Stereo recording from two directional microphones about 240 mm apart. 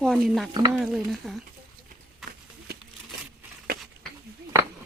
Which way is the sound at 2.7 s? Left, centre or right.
Right.